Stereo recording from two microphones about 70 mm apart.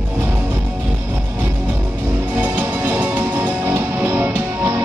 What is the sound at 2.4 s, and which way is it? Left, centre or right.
Music, right.